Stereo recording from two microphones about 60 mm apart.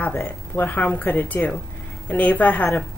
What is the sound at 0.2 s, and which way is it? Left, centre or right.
A woman's voice, left.